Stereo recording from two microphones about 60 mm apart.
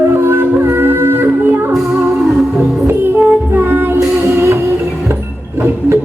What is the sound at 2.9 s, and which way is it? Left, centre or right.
Music, right.